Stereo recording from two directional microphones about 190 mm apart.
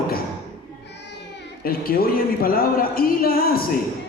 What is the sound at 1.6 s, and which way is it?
A man's voice, 50° left (ahead or behind).